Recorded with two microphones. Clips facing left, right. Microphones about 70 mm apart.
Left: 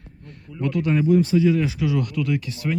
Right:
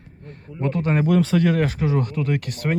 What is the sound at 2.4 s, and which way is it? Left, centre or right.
Speech, right.